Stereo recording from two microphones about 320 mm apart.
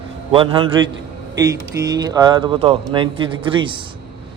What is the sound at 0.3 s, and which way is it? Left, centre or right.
Speech, centre.